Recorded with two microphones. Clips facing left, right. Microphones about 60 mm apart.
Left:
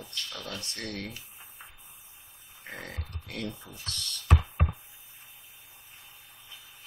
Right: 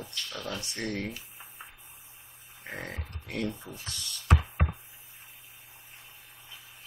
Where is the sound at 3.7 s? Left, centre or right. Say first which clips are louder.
Left 1 dB; centre.